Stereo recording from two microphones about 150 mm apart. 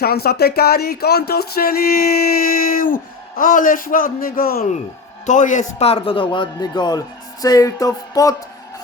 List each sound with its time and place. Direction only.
0.0 s speech: 90° left
2.7 s a man's voice: 70° left (ahead or behind)
5.2 s a man's voice: 55° left (ahead or behind); by 7.0 s 30° left (ahead or behind)
7.4 s a sound: 25° left (ahead or behind)